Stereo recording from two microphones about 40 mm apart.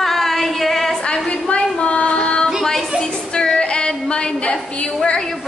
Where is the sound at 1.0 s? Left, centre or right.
Left.